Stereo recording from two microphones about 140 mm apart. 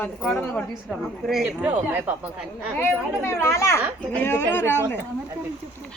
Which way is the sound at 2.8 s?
15° left (ahead or behind).